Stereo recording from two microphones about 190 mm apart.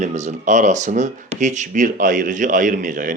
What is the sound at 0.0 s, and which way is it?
Speech, 40° right (ahead or behind).